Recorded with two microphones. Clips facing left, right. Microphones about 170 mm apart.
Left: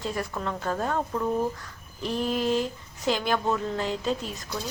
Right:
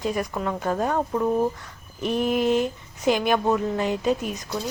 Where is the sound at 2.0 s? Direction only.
15° right (ahead or behind).